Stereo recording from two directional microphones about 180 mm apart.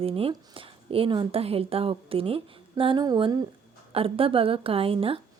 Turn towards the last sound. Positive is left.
turn(degrees=-30)  # may be behind; listen again after turning